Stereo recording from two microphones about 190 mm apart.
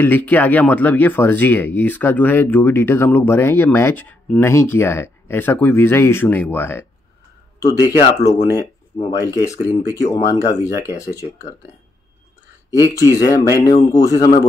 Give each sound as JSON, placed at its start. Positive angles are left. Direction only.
{"t": 0.0, "sound": "speech", "side_deg": 10}
{"t": 12.7, "sound": "speech", "side_deg": 20}